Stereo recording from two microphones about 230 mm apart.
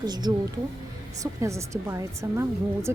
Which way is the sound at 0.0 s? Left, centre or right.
Centre.